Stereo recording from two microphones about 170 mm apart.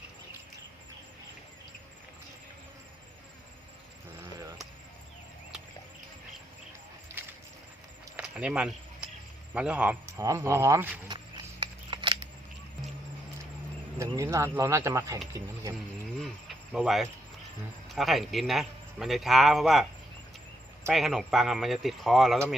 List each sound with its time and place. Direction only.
7.2 s a sound: 10° right (ahead or behind)
9.6 s speech: 5° right (ahead or behind)
11.6 s scissors: 30° right (ahead or behind)
14.0 s speech: 15° right (ahead or behind)
16.2 s cricket: centre (ahead or behind)
17.8 s a man's voice: centre (ahead or behind)
20.9 s a man's voice: centre (ahead or behind)